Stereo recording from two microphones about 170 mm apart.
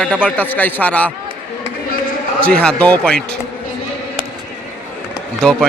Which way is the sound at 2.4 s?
5° left (ahead or behind).